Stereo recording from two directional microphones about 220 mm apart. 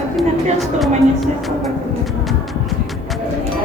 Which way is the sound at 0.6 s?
Centre (ahead or behind).